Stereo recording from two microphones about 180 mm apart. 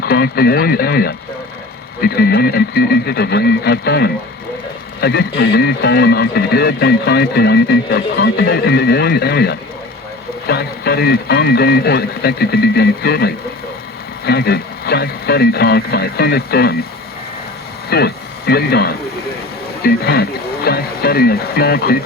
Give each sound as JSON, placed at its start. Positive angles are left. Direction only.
{"t": 0.0, "sound": "speech", "side_deg": 60}
{"t": 17.8, "sound": "speech", "side_deg": 60}